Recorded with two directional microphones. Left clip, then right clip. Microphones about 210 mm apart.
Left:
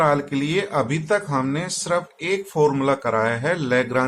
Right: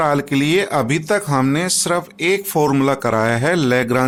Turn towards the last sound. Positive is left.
turn(degrees=-55)  # may be behind; listen again after turning